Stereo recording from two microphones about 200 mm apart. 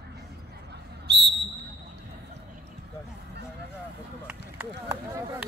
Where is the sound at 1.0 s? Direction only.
60° right (ahead or behind).